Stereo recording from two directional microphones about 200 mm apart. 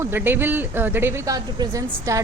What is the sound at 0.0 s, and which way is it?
A woman's voice, 10° right (ahead or behind).